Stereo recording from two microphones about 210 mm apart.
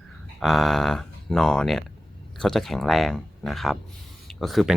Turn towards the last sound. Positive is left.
turn(degrees=0)  # may be behind; listen again after turning